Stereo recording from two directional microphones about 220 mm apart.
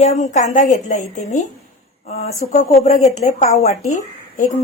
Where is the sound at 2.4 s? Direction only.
35° left (ahead or behind).